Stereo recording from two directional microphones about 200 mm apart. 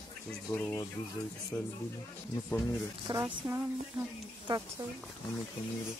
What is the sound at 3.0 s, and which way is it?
Speech, 20° right (ahead or behind).